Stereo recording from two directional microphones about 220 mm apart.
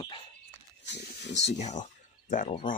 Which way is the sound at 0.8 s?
50° left (ahead or behind).